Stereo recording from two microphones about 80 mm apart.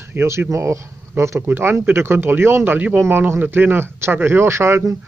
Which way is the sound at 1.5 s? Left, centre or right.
Right.